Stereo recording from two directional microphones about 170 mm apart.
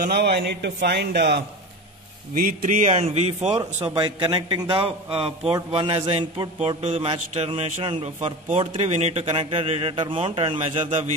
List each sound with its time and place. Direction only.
0.0 s speech: 75° right (ahead or behind)
2.3 s a man's voice: 50° right (ahead or behind)
3.9 s a man's voice: 25° right (ahead or behind)
6.8 s a man's voice: 40° right (ahead or behind)